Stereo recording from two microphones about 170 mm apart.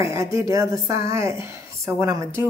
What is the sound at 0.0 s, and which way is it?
A woman's voice, 15° right (ahead or behind).